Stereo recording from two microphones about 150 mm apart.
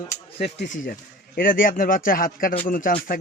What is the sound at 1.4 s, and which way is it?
A man's voice, 70° left (ahead or behind).